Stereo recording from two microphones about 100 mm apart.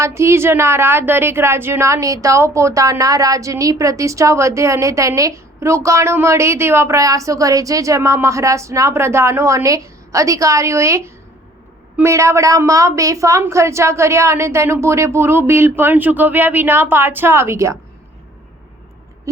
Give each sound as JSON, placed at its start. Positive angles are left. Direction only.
{"t": 0.0, "sound": "a woman's voice", "side_deg": -30}